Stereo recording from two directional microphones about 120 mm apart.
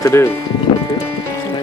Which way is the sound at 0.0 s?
25° left (ahead or behind).